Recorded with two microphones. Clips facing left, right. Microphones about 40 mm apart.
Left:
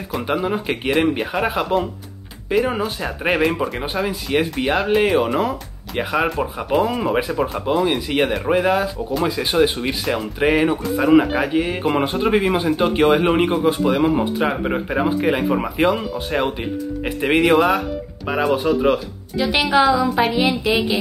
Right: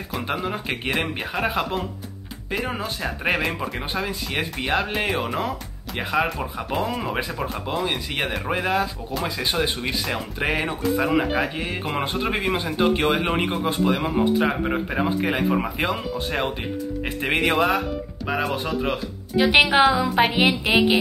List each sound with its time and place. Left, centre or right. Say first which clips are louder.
0.1 s speech: left 6 dB; centre
19.5 s a woman's voice: left 1 dB; right